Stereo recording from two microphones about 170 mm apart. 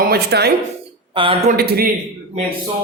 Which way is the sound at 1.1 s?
30° right (ahead or behind).